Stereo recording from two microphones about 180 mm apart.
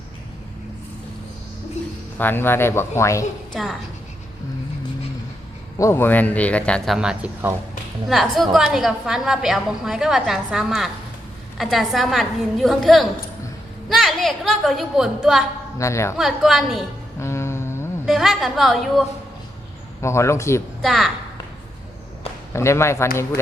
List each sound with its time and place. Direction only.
2.1 s speech: 10° left (ahead or behind)
3.5 s a woman's voice: centre (ahead or behind)
5.7 s a woman's voice: 15° left (ahead or behind); by 15.4 s centre (ahead or behind)
15.8 s speech: 15° left (ahead or behind)
16.1 s a woman's voice: centre (ahead or behind)
17.2 s music: 15° left (ahead or behind)
18.0 s a woman's voice: centre (ahead or behind)
20.0 s speech: 15° left (ahead or behind)
20.8 s a woman's voice: centre (ahead or behind)
22.5 s speech: 15° left (ahead or behind)